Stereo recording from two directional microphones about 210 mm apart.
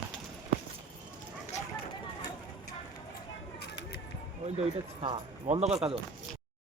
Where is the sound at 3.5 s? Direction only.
50° left (ahead or behind).